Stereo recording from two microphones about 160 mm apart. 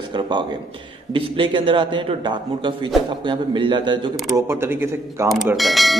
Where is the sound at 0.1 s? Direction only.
30° right (ahead or behind).